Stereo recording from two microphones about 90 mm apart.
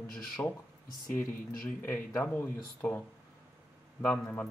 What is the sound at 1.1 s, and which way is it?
Speech, 20° left (ahead or behind).